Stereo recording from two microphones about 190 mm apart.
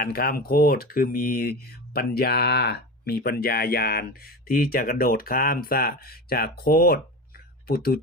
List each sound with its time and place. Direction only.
0.0 s speech: 50° left (ahead or behind)